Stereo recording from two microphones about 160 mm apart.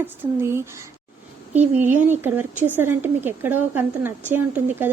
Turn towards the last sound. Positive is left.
turn(degrees=-10)  # may be behind; listen again after turning